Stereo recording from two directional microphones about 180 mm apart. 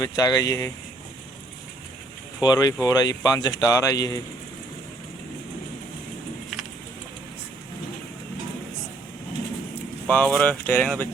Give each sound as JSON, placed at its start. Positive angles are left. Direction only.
{"t": 0.0, "sound": "speech", "side_deg": 20}
{"t": 2.4, "sound": "speech", "side_deg": 20}
{"t": 10.1, "sound": "speech", "side_deg": 10}